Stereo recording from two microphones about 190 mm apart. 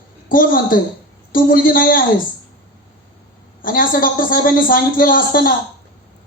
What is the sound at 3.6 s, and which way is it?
A man's voice, 50° left (ahead or behind).